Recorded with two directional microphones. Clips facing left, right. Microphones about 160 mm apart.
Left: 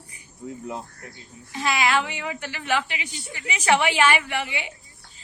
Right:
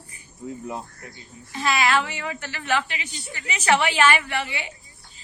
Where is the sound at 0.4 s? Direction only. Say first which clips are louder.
Right 1 dB; centre (ahead or behind).